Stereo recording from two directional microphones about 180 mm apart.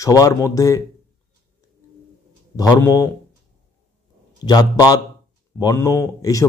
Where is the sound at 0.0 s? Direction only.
20° left (ahead or behind).